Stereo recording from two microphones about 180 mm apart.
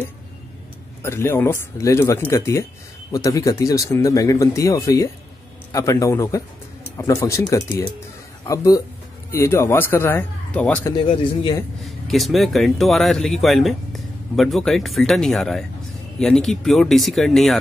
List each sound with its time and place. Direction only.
1.0 s speech: 15° left (ahead or behind)
10.9 s speech: 25° left (ahead or behind)
11.8 s speech: centre (ahead or behind)